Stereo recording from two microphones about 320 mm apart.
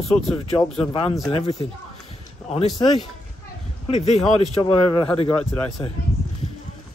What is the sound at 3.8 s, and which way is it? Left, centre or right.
Speech, left.